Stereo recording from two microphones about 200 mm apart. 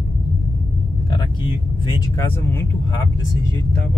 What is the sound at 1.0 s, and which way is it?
Vehicle, 25° left (ahead or behind).